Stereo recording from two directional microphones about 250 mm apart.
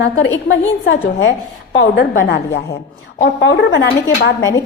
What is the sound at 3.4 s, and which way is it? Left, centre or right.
Speech, left.